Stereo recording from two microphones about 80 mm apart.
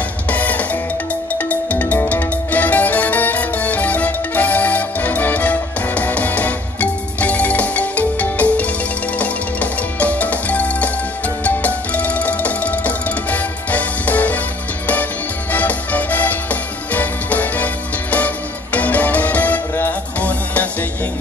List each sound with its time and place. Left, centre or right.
0.3 s music: centre
15.5 s music: centre